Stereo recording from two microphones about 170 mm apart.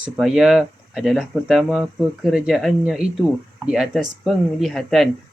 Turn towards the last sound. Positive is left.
turn(degrees=0)  # may be behind; listen again after turning